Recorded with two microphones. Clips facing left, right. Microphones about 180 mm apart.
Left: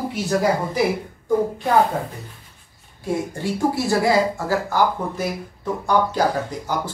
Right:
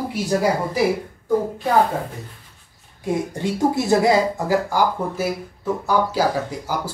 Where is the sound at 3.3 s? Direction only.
20° right (ahead or behind).